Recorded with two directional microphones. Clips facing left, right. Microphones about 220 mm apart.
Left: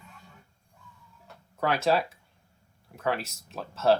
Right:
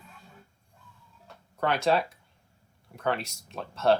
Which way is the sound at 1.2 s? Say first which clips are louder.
Even; centre (ahead or behind).